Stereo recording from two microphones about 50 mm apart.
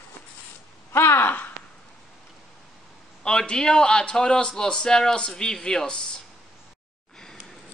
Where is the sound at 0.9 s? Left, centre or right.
Left.